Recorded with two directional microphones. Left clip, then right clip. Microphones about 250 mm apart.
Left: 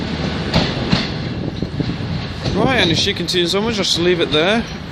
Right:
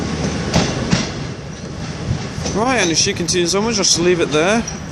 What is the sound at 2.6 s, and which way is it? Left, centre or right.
Speech, centre.